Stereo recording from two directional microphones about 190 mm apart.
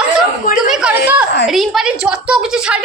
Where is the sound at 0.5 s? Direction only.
5° right (ahead or behind).